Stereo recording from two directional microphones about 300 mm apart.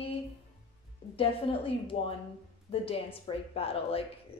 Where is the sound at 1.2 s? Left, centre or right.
Centre.